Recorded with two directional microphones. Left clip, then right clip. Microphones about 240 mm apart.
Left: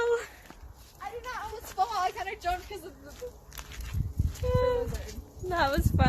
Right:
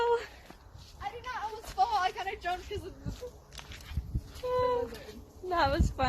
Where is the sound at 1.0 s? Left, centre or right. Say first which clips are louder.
Even; left.